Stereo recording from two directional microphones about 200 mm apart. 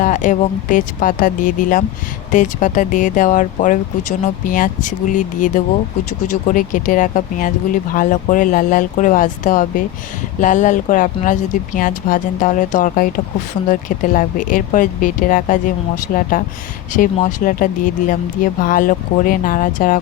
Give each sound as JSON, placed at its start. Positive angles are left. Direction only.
{"t": 0.0, "sound": "speech", "side_deg": 40}